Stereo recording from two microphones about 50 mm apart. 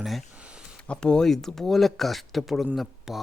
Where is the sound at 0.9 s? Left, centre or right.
Centre.